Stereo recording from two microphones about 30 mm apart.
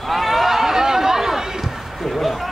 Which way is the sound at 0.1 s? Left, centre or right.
Centre.